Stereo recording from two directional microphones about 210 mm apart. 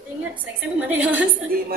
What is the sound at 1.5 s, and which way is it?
Speech, 45° right (ahead or behind).